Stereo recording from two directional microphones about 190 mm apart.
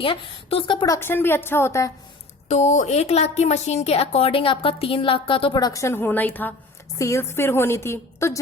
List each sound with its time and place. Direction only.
0.0 s a woman's voice: 30° left (ahead or behind)
0.9 s a woman's voice: 10° left (ahead or behind)
2.5 s a woman's voice: 40° left (ahead or behind); by 8.4 s 15° left (ahead or behind)